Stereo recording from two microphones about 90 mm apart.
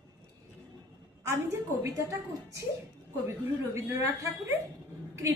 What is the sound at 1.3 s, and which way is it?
A woman's voice, 30° right (ahead or behind).